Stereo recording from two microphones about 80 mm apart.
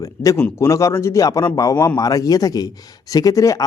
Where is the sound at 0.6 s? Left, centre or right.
Left.